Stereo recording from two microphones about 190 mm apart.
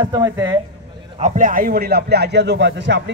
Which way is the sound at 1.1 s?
40° right (ahead or behind).